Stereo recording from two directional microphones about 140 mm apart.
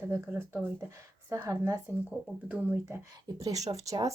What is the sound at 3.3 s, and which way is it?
Speech, 30° right (ahead or behind).